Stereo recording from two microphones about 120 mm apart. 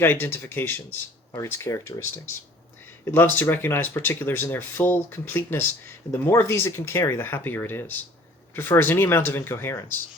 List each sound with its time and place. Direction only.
0.0 s speech: 20° left (ahead or behind)